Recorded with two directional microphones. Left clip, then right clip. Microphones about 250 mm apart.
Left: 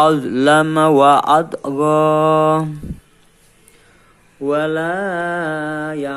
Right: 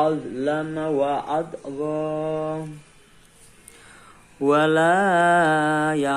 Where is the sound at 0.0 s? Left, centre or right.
Left.